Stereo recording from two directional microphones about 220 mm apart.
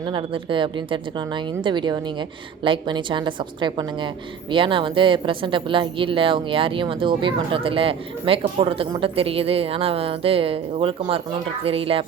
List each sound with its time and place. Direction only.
0.1 s speech: 20° right (ahead or behind)